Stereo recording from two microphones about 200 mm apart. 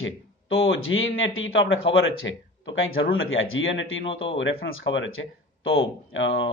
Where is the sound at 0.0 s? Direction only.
75° left (ahead or behind).